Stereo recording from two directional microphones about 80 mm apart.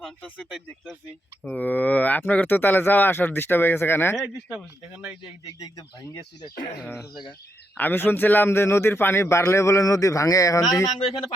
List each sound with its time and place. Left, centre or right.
1.5 s speech: centre
5.5 s speech: left
7.1 s speech: left
7.8 s a man's voice: left